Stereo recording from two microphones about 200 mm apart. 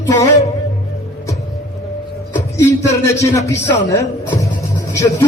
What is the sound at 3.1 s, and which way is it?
Speech, 15° left (ahead or behind).